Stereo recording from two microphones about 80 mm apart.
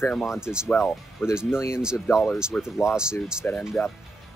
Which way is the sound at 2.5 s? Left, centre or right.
Centre.